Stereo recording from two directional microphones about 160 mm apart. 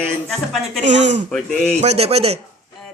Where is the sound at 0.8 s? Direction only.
50° right (ahead or behind).